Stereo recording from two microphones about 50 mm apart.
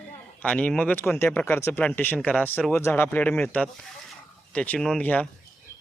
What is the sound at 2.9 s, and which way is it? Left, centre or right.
Speech, left.